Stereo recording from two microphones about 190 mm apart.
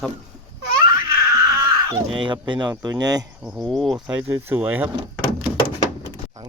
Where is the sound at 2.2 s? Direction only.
25° right (ahead or behind).